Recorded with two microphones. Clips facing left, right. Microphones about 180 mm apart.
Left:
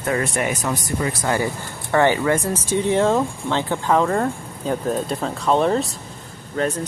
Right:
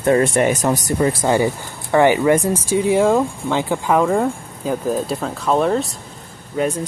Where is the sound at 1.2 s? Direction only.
20° right (ahead or behind); by 5.9 s centre (ahead or behind).